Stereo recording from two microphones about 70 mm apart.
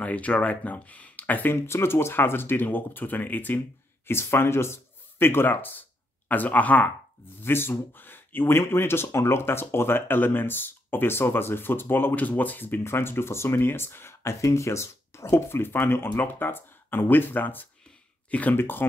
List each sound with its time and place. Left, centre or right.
0.0 s speech: centre
7.4 s speech: left